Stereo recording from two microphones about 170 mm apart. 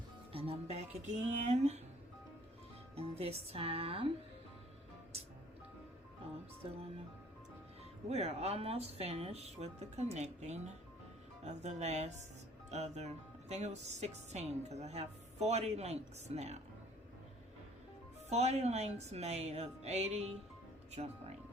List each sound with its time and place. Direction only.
0.3 s a woman's voice: 35° right (ahead or behind)
2.9 s a woman's voice: 35° right (ahead or behind)
8.1 s a woman's voice: 40° right (ahead or behind)
18.3 s a woman's voice: 40° right (ahead or behind)